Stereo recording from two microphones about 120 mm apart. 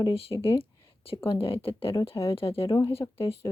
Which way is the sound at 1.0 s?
50° left (ahead or behind).